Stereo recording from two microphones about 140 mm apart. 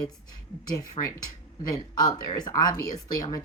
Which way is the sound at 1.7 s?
25° left (ahead or behind).